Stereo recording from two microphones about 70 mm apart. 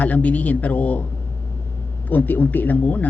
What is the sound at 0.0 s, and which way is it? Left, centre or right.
Speech, left.